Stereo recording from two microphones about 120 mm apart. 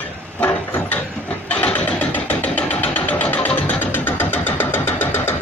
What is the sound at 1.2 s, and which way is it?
Vehicle, 10° left (ahead or behind).